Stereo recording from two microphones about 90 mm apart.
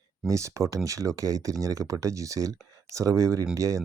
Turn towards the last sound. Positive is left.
turn(degrees=-40)  # may be behind; listen again after turning